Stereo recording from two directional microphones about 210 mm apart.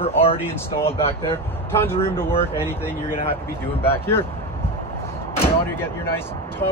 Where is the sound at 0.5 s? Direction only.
10° left (ahead or behind).